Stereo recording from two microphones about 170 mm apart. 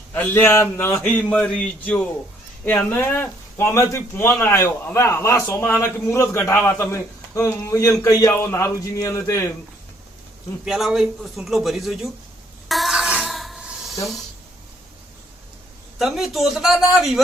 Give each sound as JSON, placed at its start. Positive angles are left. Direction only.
{"t": 0.1, "sound": "a man's voice", "side_deg": 10}
{"t": 10.7, "sound": "a man's voice", "side_deg": 0}
{"t": 12.6, "sound": "a sound", "side_deg": 0}
{"t": 16.0, "sound": "a man's voice", "side_deg": 0}